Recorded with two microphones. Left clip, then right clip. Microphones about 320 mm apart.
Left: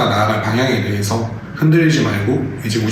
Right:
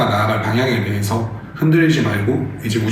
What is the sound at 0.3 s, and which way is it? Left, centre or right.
A man's voice, centre.